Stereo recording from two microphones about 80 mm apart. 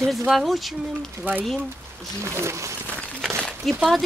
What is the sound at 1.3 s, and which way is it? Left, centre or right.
Speech, right.